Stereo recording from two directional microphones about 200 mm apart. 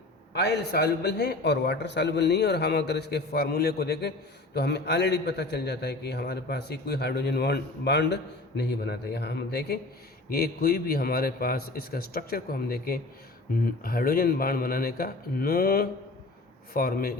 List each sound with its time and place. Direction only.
0.3 s a man's voice: 55° left (ahead or behind)